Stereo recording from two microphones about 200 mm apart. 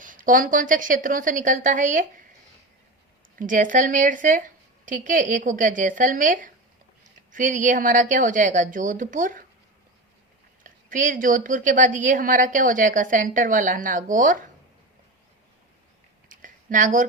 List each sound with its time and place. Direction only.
0.0 s a woman's voice: 40° right (ahead or behind)
3.3 s a woman's voice: 40° right (ahead or behind)
10.6 s a woman's voice: 40° right (ahead or behind)
16.3 s a sound: 40° right (ahead or behind)